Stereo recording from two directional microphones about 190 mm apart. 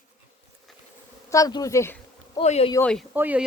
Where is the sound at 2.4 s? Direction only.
35° left (ahead or behind).